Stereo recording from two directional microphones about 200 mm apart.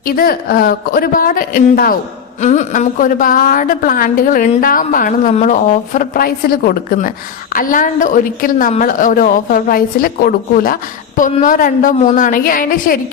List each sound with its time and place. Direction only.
0.0 s a woman's voice: 45° left (ahead or behind)